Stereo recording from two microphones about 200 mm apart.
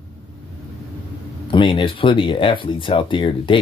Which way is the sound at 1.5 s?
25° left (ahead or behind).